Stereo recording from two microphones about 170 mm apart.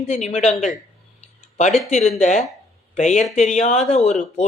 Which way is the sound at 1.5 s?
40° left (ahead or behind).